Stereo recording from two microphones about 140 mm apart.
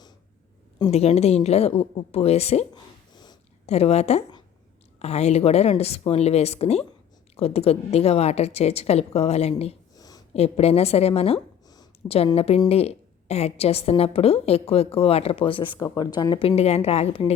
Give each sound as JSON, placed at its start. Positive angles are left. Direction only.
{"t": 0.9, "sound": "a woman's voice", "side_deg": 45}
{"t": 3.7, "sound": "a woman's voice", "side_deg": 50}
{"t": 9.9, "sound": "a sound", "side_deg": 25}
{"t": 10.3, "sound": "a woman's voice", "side_deg": 45}
{"t": 16.4, "sound": "a woman's voice", "side_deg": 50}